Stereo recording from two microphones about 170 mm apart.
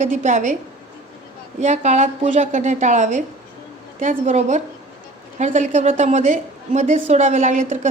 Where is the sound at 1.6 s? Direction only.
45° right (ahead or behind).